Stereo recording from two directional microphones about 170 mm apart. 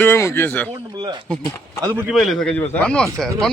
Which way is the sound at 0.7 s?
25° right (ahead or behind).